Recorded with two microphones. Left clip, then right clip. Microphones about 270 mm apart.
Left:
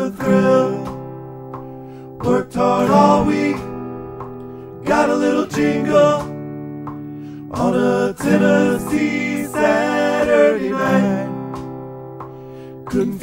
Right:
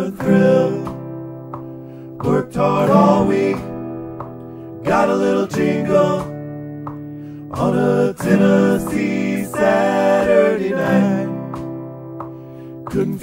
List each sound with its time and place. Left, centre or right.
0.0 s music: centre
2.3 s music: centre
4.8 s music: centre
7.6 s music: centre
12.9 s music: centre